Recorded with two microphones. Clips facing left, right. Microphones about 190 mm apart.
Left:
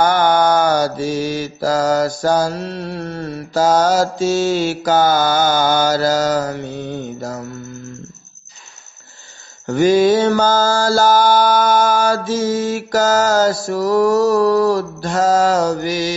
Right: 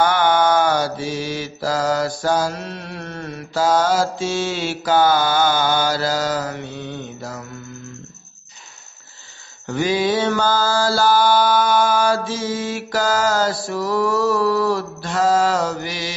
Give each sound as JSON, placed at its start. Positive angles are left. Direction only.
{"t": 0.0, "sound": "mantra", "side_deg": 40}
{"t": 9.7, "sound": "mantra", "side_deg": 45}